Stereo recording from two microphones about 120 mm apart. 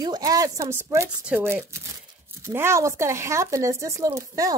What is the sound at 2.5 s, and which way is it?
Speech, 20° right (ahead or behind).